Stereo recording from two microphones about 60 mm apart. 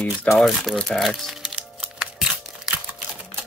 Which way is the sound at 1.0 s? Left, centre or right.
Centre.